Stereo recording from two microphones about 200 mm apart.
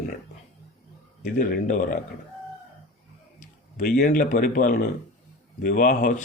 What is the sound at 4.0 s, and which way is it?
Speech, 40° left (ahead or behind).